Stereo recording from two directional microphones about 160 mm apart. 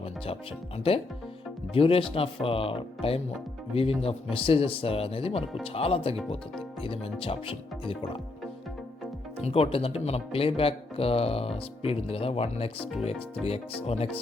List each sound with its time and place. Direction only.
0.8 s speech: 35° left (ahead or behind)
9.4 s speech: 40° left (ahead or behind)